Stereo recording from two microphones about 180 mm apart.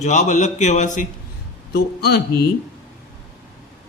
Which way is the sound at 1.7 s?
60° left (ahead or behind).